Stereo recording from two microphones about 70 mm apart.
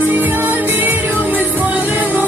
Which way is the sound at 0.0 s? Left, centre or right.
Right.